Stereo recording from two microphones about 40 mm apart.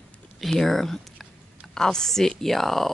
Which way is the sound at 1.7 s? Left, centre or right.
Centre.